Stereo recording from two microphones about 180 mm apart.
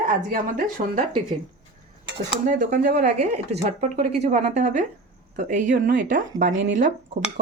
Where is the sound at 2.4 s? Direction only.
45° right (ahead or behind).